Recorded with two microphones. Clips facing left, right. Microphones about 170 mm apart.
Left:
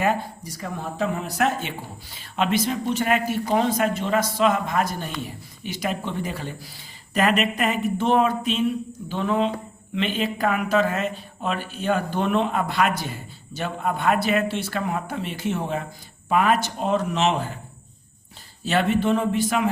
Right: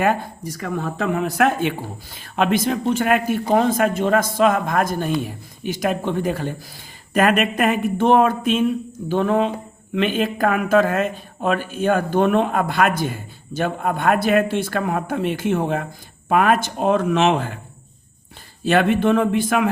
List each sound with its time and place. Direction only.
0.0 s speech: 55° right (ahead or behind)
18.6 s speech: 55° right (ahead or behind)